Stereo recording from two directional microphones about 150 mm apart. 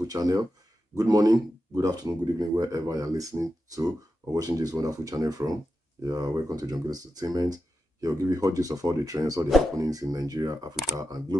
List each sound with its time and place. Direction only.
0.0 s speech: 25° right (ahead or behind)
9.5 s speech: centre (ahead or behind)
9.8 s speech: 25° right (ahead or behind)